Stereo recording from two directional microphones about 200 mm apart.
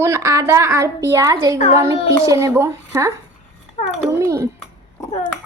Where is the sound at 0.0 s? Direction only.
15° right (ahead or behind).